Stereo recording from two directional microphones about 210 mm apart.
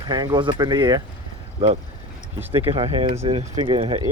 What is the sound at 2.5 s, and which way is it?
Speech, 25° right (ahead or behind).